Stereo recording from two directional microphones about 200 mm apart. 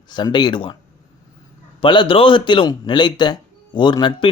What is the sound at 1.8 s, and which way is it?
A man's voice, 25° left (ahead or behind).